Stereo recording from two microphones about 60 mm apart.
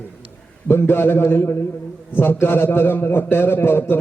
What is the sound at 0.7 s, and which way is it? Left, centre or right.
A man's voice, left.